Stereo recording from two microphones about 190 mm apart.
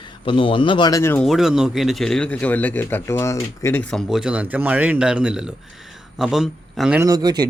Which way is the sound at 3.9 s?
Centre (ahead or behind).